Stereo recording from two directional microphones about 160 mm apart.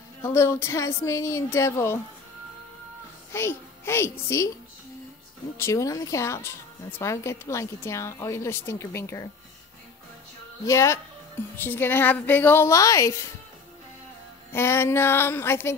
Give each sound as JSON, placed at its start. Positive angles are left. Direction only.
{"t": 0.2, "sound": "speech", "side_deg": 15}
{"t": 3.3, "sound": "speech", "side_deg": 15}
{"t": 5.6, "sound": "speech", "side_deg": 20}
{"t": 10.6, "sound": "speech", "side_deg": 20}
{"t": 14.5, "sound": "speech", "side_deg": 15}